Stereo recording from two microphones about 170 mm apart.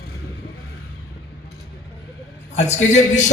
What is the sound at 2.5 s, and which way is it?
Speech, 40° left (ahead or behind).